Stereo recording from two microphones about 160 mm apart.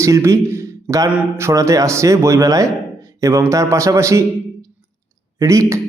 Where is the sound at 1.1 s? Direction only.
15° right (ahead or behind).